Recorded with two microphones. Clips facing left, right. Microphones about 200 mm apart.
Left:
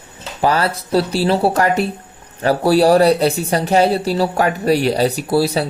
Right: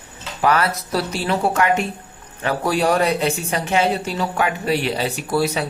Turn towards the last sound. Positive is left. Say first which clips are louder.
# left 4 dB
turn(degrees=35)  # may be behind; listen again after turning